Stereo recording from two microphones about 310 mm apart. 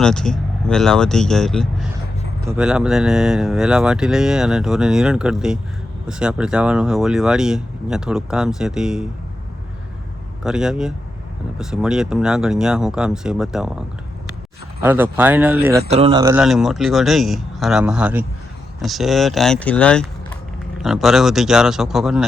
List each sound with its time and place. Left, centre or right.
0.0 s speech: centre
10.4 s speech: centre
15.9 s speech: centre